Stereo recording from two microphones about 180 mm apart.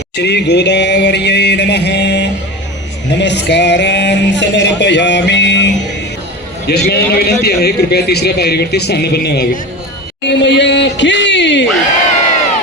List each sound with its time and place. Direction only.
0.2 s speech: 70° left (ahead or behind)
6.7 s a man's voice: 60° left (ahead or behind)
10.2 s speech: 75° left (ahead or behind)